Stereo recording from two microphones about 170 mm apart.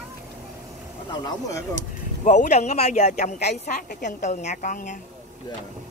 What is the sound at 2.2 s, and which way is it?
Speech, 45° left (ahead or behind).